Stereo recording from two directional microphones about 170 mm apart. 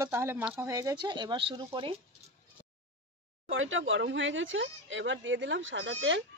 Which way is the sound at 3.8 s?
90° right.